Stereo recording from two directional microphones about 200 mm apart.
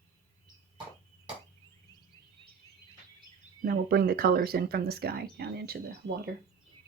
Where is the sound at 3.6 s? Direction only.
50° right (ahead or behind).